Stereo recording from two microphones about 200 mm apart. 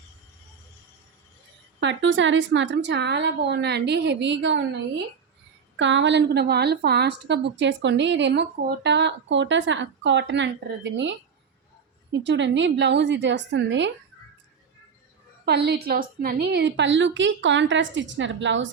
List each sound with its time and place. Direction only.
1.8 s a woman's voice: 65° right (ahead or behind)
5.7 s a woman's voice: 65° right (ahead or behind)
12.1 s a woman's voice: 60° right (ahead or behind)
15.4 s a woman's voice: 55° right (ahead or behind)